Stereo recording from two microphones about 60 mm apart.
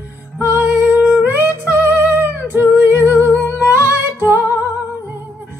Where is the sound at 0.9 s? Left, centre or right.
Right.